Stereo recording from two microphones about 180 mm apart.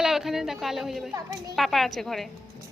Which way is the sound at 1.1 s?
20° right (ahead or behind).